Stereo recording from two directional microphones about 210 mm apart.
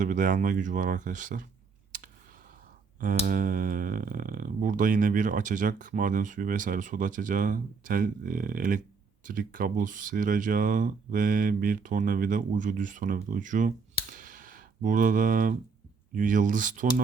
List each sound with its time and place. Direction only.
0.0 s speech: 40° right (ahead or behind)
1.9 s clicking: 40° right (ahead or behind)
3.0 s speech: 40° right (ahead or behind)